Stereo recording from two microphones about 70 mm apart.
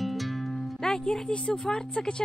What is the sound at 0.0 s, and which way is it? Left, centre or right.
Speech, centre.